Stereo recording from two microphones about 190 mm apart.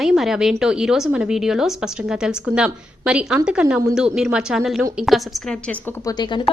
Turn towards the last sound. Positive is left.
turn(degrees=25)  # may be behind; listen again after turning